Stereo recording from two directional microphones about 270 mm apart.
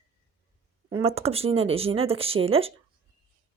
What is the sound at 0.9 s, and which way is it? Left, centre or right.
Speech, right.